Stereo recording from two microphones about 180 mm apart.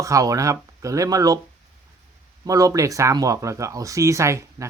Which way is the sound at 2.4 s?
20° right (ahead or behind).